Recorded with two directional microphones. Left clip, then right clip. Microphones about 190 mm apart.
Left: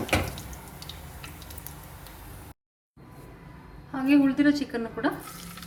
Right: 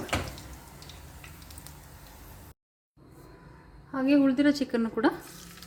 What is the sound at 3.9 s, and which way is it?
A woman's voice, 45° right (ahead or behind).